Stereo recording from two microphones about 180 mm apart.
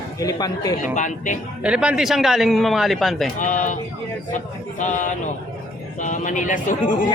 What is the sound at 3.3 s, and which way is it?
Speech, 45° left (ahead or behind).